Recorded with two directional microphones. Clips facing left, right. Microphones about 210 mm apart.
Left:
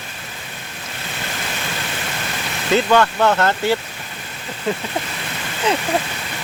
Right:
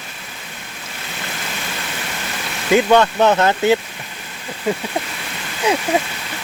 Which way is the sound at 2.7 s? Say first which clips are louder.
Right 2 dB; 15° right (ahead or behind).